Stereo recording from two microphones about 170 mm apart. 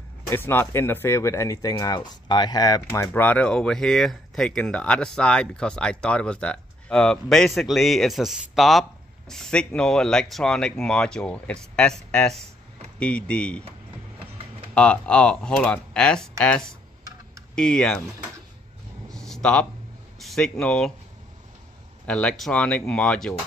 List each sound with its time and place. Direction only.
0.3 s speech: 15° left (ahead or behind)
2.9 s speech: 10° left (ahead or behind)
14.7 s speech: 5° left (ahead or behind)
19.0 s a sound: 5° left (ahead or behind)
20.2 s speech: centre (ahead or behind)
22.0 s speech: 5° left (ahead or behind)